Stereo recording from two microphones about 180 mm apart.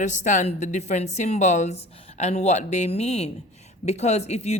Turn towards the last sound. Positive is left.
turn(degrees=35)  # may be behind; listen again after turning